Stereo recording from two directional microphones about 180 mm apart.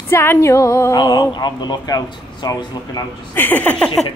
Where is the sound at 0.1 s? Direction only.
15° left (ahead or behind).